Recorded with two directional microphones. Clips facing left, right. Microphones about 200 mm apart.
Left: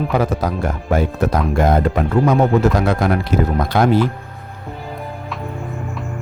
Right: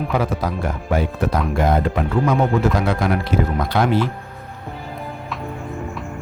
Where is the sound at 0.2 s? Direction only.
40° left (ahead or behind).